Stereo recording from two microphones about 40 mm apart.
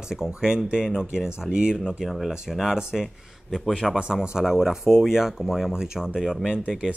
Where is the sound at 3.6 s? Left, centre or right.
Centre.